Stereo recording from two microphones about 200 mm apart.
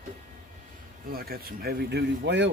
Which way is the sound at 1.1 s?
50° right (ahead or behind).